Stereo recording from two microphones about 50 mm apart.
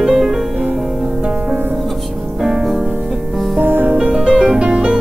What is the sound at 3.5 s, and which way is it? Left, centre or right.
Music, right.